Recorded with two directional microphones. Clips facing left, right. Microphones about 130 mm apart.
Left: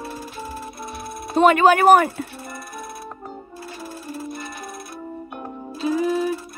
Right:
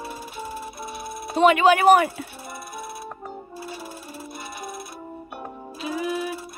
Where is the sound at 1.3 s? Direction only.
45° left (ahead or behind).